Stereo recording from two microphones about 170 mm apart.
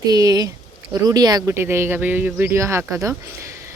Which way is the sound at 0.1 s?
20° right (ahead or behind).